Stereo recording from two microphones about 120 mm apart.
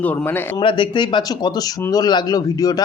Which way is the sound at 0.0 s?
15° left (ahead or behind).